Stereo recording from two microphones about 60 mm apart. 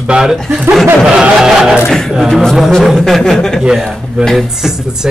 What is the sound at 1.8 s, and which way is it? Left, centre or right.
A man's voice, centre.